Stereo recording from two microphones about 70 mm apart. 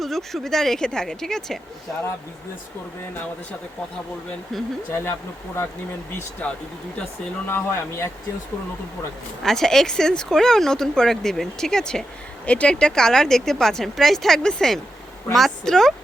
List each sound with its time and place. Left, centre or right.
0.0 s speech: centre
4.9 s speech: left
6.4 s speech: left
7.4 s speech: left
9.4 s speech: centre